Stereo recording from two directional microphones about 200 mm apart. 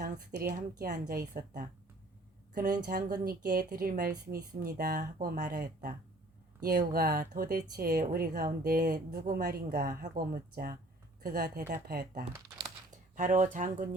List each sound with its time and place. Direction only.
0.0 s a woman's voice: 50° right (ahead or behind)